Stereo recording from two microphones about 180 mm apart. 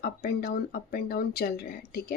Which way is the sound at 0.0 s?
55° left (ahead or behind).